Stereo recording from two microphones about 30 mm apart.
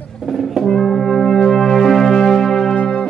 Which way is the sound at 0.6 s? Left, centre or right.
Centre.